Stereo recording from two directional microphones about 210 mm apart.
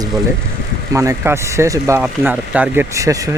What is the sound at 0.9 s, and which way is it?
Speech, 15° right (ahead or behind).